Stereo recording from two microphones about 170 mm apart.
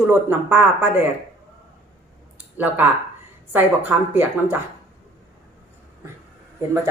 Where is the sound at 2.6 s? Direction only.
10° right (ahead or behind).